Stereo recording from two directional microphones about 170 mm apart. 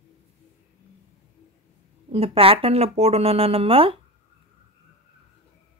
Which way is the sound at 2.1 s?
35° right (ahead or behind).